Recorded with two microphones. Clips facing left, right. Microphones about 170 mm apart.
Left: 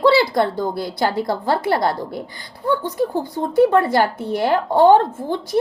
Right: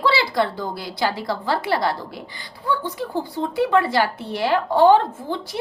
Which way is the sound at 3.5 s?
45° left (ahead or behind).